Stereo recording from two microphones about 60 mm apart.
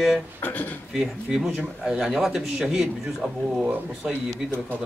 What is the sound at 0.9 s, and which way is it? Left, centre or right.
Speech, centre.